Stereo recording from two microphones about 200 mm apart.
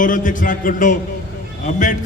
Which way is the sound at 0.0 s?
40° left (ahead or behind).